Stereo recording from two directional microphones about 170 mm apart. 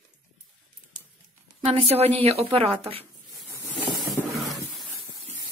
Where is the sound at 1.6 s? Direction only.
35° right (ahead or behind).